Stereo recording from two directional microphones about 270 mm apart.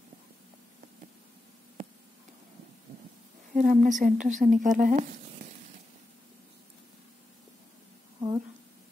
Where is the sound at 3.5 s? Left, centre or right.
Right.